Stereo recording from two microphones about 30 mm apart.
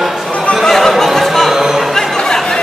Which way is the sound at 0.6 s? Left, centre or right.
Centre.